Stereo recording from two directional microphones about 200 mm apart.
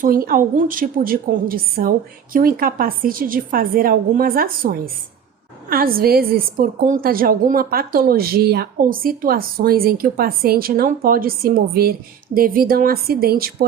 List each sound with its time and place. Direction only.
0.0 s a woman's voice: 45° right (ahead or behind)